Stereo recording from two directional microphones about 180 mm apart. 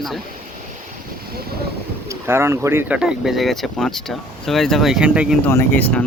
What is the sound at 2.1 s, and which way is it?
Speech, 15° right (ahead or behind).